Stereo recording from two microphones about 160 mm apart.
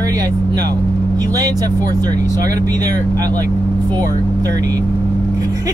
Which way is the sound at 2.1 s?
55° left (ahead or behind).